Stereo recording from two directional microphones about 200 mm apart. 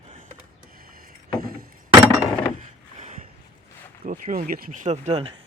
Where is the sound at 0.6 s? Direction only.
45° right (ahead or behind).